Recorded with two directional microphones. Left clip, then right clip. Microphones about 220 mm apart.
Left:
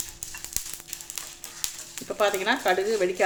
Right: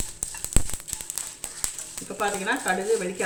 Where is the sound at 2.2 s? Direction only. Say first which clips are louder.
Left 3 dB; 50° left (ahead or behind).